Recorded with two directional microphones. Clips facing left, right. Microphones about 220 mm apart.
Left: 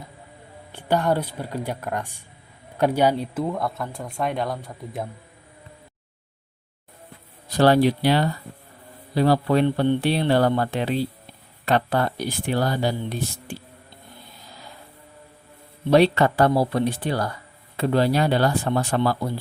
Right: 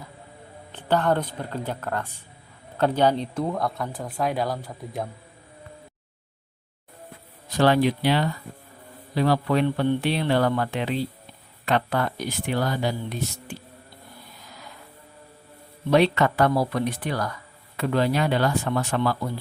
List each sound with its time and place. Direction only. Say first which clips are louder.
0.7 s speech: left 1 dB; 10° left (ahead or behind)
7.5 s speech: left 3 dB; 35° left (ahead or behind)
15.9 s speech: left 3 dB; 35° left (ahead or behind)